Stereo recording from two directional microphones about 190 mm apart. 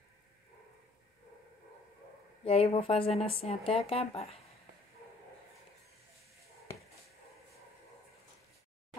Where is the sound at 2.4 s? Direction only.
30° left (ahead or behind).